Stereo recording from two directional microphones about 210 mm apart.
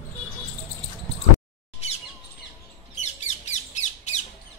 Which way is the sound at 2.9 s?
30° left (ahead or behind).